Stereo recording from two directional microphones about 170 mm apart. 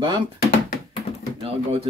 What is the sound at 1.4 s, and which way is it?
Speech, 35° right (ahead or behind).